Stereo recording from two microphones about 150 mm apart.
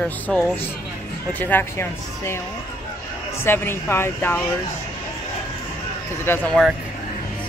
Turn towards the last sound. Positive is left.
turn(degrees=10)  # may be behind; listen again after turning